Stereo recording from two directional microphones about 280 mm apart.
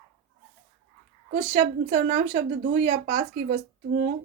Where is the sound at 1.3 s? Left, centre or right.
Right.